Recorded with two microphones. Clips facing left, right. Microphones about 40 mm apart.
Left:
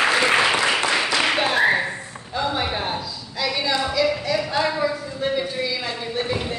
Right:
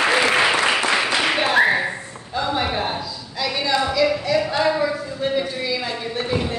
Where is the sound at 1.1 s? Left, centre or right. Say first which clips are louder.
Right 2 dB; centre.